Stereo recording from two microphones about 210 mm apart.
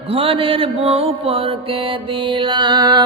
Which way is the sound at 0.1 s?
25° right (ahead or behind).